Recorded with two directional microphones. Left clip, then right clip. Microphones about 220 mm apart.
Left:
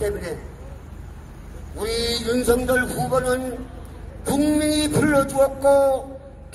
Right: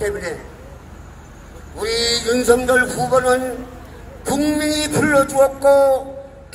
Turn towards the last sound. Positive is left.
turn(degrees=-10)  # may be behind; listen again after turning